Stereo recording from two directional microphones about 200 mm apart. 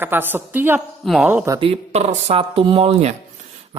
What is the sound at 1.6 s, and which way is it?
Speech, 30° right (ahead or behind).